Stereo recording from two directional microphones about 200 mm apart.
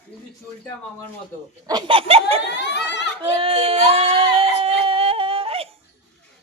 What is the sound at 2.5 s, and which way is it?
Speech, 60° left (ahead or behind).